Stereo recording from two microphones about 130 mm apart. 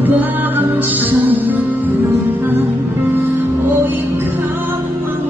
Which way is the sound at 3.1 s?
15° right (ahead or behind).